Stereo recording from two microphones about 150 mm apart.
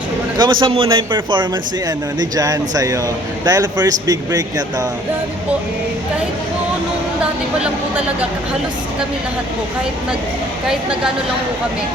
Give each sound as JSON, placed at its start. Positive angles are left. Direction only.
{"t": 0.3, "sound": "a man's voice", "side_deg": -30}
{"t": 7.6, "sound": "speech", "side_deg": -10}
{"t": 10.7, "sound": "a woman's voice", "side_deg": -5}